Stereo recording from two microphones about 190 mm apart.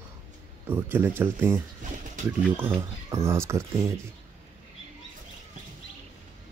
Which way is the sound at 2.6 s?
10° right (ahead or behind).